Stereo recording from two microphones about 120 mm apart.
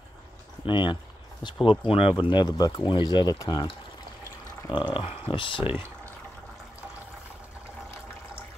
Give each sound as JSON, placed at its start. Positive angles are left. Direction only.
{"t": 0.7, "sound": "speech", "side_deg": 40}
{"t": 4.7, "sound": "speech", "side_deg": 40}
{"t": 5.7, "sound": "a sound", "side_deg": -20}